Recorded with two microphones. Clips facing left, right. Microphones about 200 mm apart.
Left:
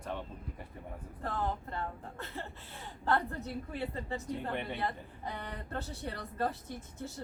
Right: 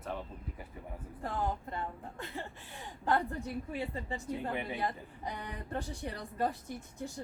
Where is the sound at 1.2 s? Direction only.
15° right (ahead or behind).